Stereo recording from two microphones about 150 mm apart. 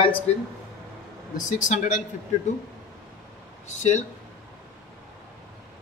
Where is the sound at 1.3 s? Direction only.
55° left (ahead or behind).